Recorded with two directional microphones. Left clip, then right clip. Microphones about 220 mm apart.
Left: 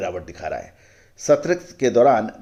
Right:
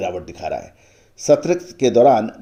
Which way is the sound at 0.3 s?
20° right (ahead or behind).